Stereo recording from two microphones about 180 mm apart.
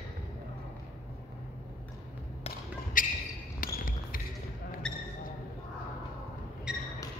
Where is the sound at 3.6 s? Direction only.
50° left (ahead or behind).